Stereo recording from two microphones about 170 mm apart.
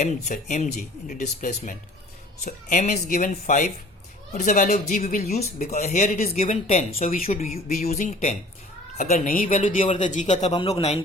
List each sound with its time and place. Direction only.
0.0 s speech: 45° left (ahead or behind)
9.0 s speech: 55° left (ahead or behind); by 11.0 s 35° left (ahead or behind)